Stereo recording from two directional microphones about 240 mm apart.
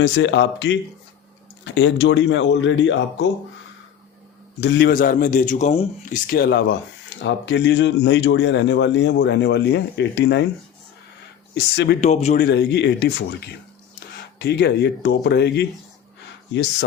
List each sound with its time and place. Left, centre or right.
0.0 s speech: left
4.6 s a man's voice: left
6.3 s speech: left
11.5 s speech: left
11.9 s speech: left
12.5 s speech: left
14.3 s speech: left